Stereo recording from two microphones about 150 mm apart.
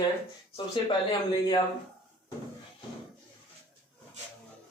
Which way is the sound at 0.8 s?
35° left (ahead or behind).